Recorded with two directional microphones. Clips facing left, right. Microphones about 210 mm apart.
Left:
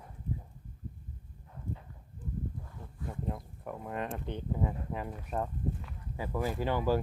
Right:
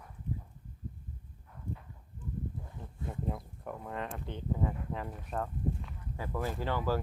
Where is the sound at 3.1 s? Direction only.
Centre (ahead or behind).